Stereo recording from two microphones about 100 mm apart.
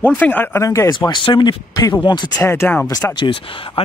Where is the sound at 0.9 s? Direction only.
50° left (ahead or behind).